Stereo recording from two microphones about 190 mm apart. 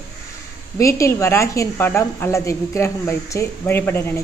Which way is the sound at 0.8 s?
15° left (ahead or behind).